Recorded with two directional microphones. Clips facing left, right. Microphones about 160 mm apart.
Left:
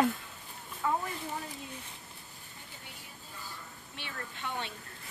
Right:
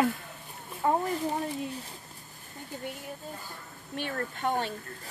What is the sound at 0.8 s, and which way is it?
Speech, 40° right (ahead or behind).